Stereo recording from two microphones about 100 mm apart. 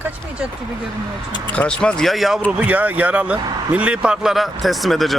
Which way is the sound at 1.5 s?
10° left (ahead or behind).